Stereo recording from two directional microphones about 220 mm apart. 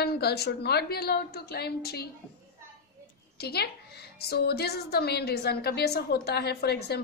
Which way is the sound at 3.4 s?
45° left (ahead or behind).